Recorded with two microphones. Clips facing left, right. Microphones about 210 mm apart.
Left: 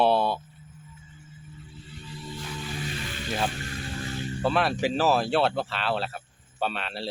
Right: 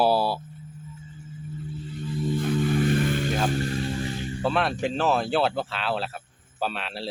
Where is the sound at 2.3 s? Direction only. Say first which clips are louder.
Right 13 dB; 55° right (ahead or behind).